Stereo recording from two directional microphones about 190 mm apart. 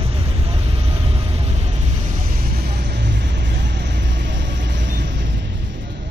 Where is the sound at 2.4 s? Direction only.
55° right (ahead or behind).